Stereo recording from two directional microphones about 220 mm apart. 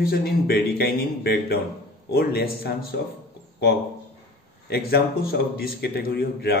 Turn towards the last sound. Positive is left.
turn(degrees=45)  # may be behind; listen again after turning